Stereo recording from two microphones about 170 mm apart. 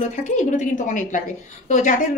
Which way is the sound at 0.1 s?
45° left (ahead or behind).